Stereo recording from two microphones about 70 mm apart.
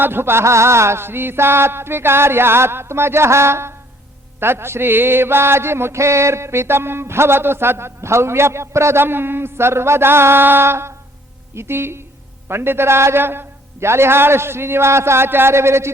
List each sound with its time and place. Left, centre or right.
0.0 s mantra: right